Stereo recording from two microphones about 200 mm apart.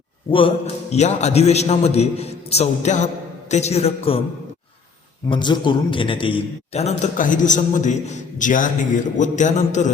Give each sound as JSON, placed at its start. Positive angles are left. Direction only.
{"t": 0.3, "sound": "a man's voice", "side_deg": 25}
{"t": 5.3, "sound": "a man's voice", "side_deg": 25}